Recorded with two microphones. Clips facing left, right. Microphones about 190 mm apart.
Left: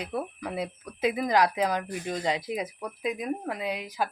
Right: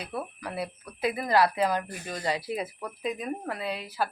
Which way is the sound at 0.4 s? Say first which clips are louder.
Left 2 dB; 20° left (ahead or behind).